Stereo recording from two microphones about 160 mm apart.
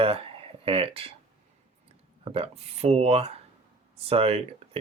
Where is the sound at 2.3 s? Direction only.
35° right (ahead or behind).